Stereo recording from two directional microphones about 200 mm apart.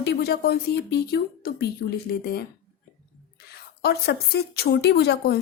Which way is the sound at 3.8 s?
50° left (ahead or behind).